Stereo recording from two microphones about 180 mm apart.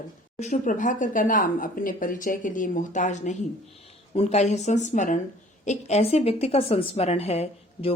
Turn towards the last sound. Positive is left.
turn(degrees=35)  # may be behind; listen again after turning